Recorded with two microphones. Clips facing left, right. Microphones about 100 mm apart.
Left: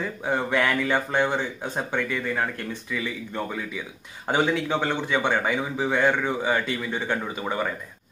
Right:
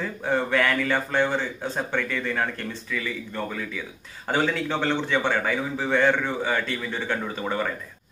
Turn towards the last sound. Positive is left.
turn(degrees=10)  # may be behind; listen again after turning